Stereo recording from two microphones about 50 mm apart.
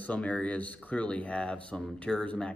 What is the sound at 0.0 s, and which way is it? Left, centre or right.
Speech, left.